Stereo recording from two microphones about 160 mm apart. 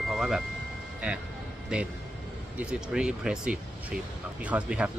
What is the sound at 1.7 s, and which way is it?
A man's voice, 5° right (ahead or behind).